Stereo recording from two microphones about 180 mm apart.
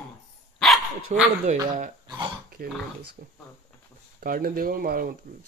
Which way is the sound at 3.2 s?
60° right (ahead or behind).